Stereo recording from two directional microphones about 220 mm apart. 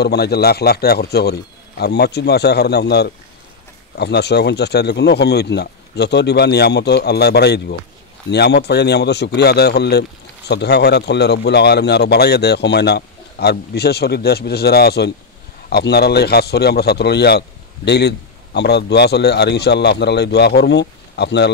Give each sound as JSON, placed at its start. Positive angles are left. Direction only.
{"t": 0.0, "sound": "a man's voice", "side_deg": 50}